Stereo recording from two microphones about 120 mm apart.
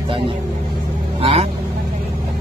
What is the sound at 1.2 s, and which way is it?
Speech, 55° right (ahead or behind).